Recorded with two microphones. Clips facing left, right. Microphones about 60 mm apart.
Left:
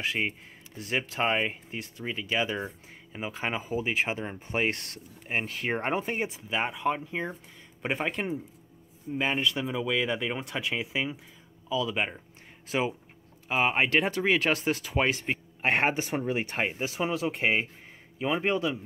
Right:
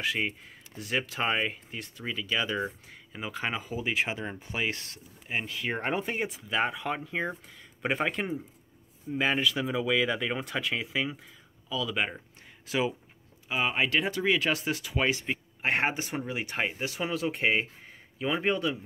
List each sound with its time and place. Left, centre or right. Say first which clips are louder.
0.0 s speech: even; left
0.9 s speech: left 1 dB; centre
4.5 s speech: left 5 dB; left
5.3 s speech: left 2 dB; left
6.6 s a man's voice: left 2 dB; centre
9.1 s speech: right 1 dB; centre
11.7 s speech: left 2 dB; left
12.6 s speech: even; left
16.8 s speech: left 2 dB; left
18.4 s speech: even; centre